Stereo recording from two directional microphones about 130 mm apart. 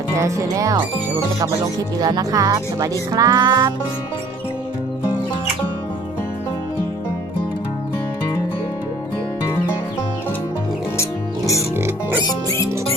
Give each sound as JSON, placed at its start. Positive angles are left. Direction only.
{"t": 0.2, "sound": "speech", "side_deg": -25}
{"t": 11.8, "sound": "music", "side_deg": -20}
{"t": 12.2, "sound": "music", "side_deg": 25}